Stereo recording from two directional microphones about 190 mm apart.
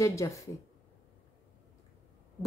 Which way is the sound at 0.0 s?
15° left (ahead or behind).